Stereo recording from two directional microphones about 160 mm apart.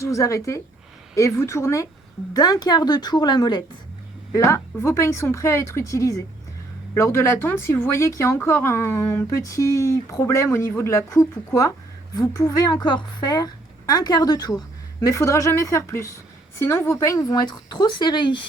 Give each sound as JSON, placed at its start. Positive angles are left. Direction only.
{"t": 0.0, "sound": "a woman's voice", "side_deg": 20}